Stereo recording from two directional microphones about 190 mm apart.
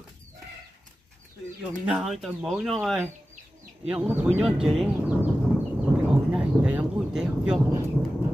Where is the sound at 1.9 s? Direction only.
5° right (ahead or behind).